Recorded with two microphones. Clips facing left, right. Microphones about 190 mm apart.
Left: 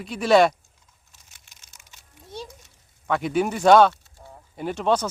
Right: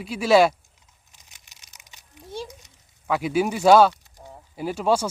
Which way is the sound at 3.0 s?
5° right (ahead or behind).